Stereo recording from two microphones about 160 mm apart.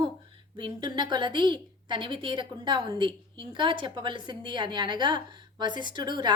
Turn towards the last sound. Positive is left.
turn(degrees=-25)  # may be behind; listen again after turning